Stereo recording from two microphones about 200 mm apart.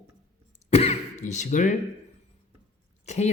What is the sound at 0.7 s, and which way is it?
Throat clearing, 35° left (ahead or behind).